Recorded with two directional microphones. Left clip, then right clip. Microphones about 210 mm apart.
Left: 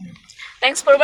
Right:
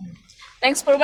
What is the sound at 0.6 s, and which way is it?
Speech, 10° left (ahead or behind).